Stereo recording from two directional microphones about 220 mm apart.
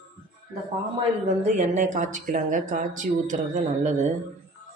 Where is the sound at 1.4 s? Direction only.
30° right (ahead or behind).